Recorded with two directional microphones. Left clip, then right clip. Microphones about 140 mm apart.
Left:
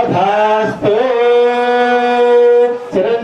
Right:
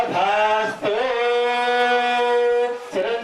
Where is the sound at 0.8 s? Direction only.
10° left (ahead or behind).